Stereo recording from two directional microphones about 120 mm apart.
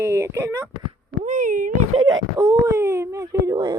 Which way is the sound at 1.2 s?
90° right.